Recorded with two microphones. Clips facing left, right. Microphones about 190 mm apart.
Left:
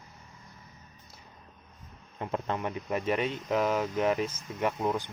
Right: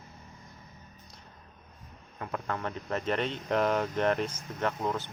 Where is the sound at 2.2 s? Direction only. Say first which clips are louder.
Left 3 dB; 20° left (ahead or behind).